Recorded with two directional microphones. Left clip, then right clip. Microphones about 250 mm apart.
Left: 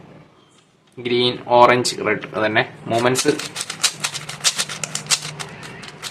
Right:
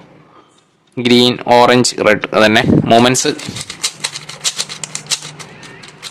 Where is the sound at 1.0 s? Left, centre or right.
Right.